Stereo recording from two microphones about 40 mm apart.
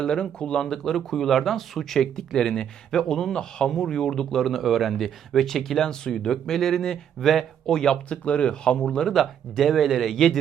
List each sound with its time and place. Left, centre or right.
0.0 s speech: left
0.6 s speech: centre
4.4 s speech: centre
5.9 s speech: centre
8.1 s speech: left
9.1 s speech: centre